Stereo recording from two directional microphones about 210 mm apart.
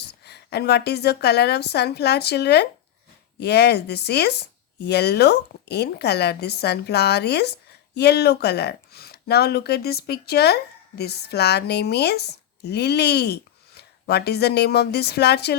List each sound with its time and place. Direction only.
0.3 s speech: 50° left (ahead or behind)